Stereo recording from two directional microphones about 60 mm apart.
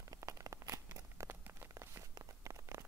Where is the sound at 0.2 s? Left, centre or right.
Right.